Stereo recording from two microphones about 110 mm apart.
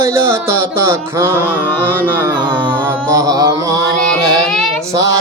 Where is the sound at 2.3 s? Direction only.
45° right (ahead or behind).